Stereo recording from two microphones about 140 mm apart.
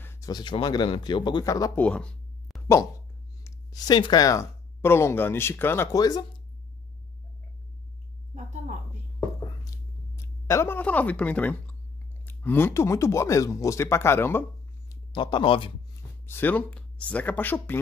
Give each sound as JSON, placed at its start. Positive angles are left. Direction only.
{"t": 0.0, "sound": "a sound", "side_deg": 15}
{"t": 0.3, "sound": "a man's voice", "side_deg": 35}
{"t": 1.8, "sound": "a sound", "side_deg": 10}
{"t": 3.4, "sound": "speech", "side_deg": 30}
{"t": 10.1, "sound": "speech", "side_deg": 20}
{"t": 15.1, "sound": "a man's voice", "side_deg": 35}
{"t": 16.3, "sound": "speech", "side_deg": 15}